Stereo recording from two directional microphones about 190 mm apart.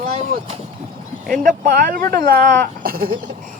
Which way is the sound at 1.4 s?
45° right (ahead or behind).